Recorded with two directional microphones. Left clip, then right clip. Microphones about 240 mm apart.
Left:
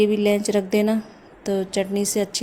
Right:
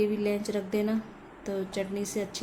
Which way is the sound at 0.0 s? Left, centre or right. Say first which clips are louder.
Left 9 dB; left.